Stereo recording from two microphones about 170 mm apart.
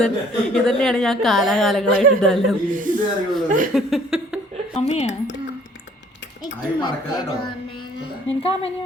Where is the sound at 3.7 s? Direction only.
Centre (ahead or behind).